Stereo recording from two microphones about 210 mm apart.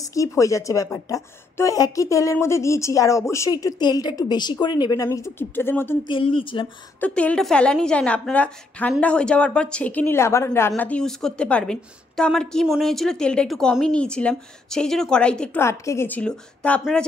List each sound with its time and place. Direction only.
0.0 s a woman's voice: 15° left (ahead or behind)
6.0 s speech: 25° left (ahead or behind)
7.0 s a woman's voice: 5° left (ahead or behind)